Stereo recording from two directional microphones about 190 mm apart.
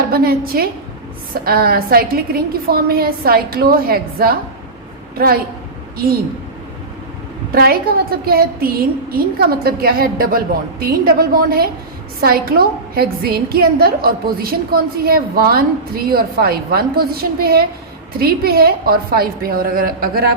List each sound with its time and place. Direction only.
0.1 s a woman's voice: 50° right (ahead or behind)
7.5 s a woman's voice: 55° right (ahead or behind)